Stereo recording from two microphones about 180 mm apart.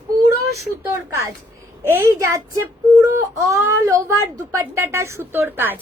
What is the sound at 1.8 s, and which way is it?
A woman's voice, 15° right (ahead or behind).